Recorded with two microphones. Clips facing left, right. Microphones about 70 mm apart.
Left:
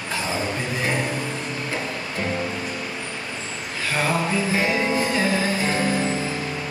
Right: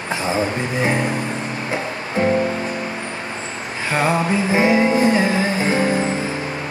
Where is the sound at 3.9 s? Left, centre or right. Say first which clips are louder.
Right 5 dB; right.